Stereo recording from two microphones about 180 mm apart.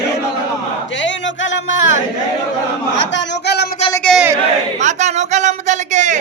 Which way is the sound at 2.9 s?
85° left.